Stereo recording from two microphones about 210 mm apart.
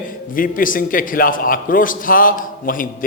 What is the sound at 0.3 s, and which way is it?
A man's voice, 40° left (ahead or behind).